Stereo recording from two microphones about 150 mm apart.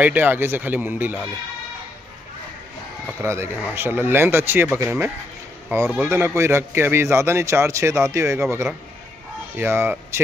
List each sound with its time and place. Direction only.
0.0 s a man's voice: 10° right (ahead or behind)
3.2 s a man's voice: 15° right (ahead or behind)